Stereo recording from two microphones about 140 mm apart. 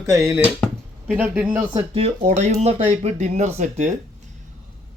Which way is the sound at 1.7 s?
30° right (ahead or behind).